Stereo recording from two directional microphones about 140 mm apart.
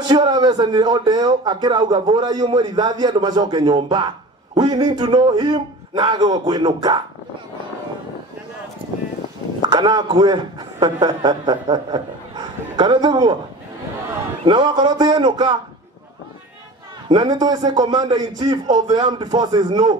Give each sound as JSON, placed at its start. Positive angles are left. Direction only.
{"t": 0.1, "sound": "speech", "side_deg": -30}
{"t": 9.7, "sound": "a man's voice", "side_deg": -30}
{"t": 14.4, "sound": "speech", "side_deg": -30}
{"t": 17.1, "sound": "a man's voice", "side_deg": -30}